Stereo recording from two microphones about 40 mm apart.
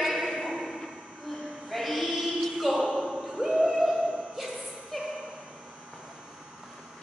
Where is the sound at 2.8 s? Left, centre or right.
Centre.